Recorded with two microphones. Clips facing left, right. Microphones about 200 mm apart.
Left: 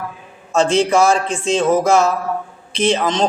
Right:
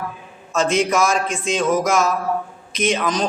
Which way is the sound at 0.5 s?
30° left (ahead or behind).